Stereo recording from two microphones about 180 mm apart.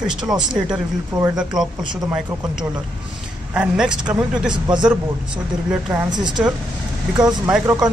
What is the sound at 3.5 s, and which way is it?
Speech, 5° right (ahead or behind).